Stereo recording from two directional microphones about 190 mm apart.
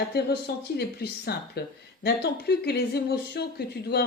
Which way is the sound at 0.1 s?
55° left (ahead or behind).